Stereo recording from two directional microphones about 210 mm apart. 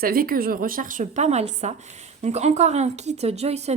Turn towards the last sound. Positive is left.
turn(degrees=-30)  # may be behind; listen again after turning